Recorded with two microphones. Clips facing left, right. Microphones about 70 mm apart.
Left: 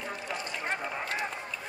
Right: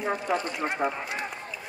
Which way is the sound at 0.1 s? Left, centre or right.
Right.